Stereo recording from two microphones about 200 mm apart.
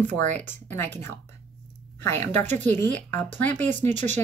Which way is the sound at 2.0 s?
10° left (ahead or behind).